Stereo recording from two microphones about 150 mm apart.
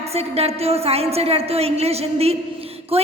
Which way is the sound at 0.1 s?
45° right (ahead or behind).